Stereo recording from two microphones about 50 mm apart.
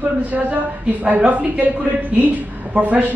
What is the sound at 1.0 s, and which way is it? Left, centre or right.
Speech, right.